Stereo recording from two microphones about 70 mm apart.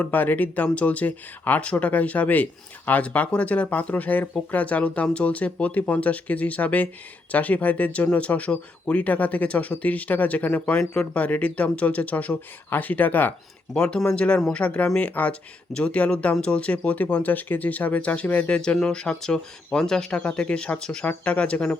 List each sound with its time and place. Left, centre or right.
0.0 s speech: left
13.7 s speech: centre